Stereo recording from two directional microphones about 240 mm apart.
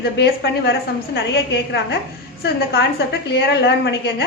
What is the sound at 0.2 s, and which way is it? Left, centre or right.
A woman's voice, left.